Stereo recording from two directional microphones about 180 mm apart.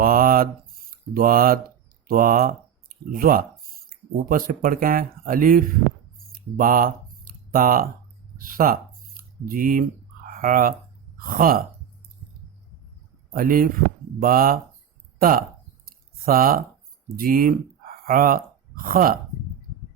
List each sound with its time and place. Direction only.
0.0 s mantra: 55° right (ahead or behind)
0.9 s speech: 55° right (ahead or behind)
6.3 s a sound: 50° right (ahead or behind)
8.4 s speech: 50° right (ahead or behind)
13.3 s speech: 50° right (ahead or behind)
15.9 s a sound: 55° right (ahead or behind)
17.2 s speech: 50° right (ahead or behind)